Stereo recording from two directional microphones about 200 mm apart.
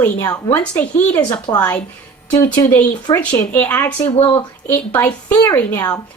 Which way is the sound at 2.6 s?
10° left (ahead or behind).